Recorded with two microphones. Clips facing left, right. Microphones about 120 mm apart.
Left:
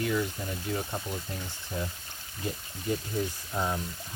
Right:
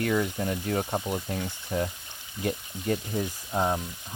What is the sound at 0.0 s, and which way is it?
Speech, 55° right (ahead or behind).